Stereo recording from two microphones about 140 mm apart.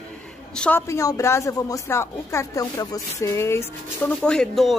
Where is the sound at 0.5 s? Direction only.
10° left (ahead or behind).